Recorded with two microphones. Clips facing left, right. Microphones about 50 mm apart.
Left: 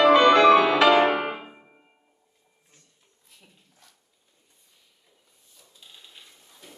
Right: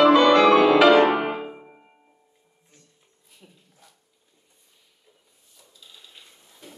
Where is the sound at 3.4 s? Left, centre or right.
Right.